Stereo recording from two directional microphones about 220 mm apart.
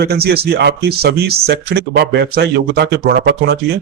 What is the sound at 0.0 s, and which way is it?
Speech, 45° right (ahead or behind).